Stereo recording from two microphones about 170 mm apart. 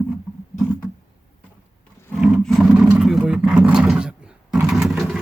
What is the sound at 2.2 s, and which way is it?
Roaring cats, 5° right (ahead or behind).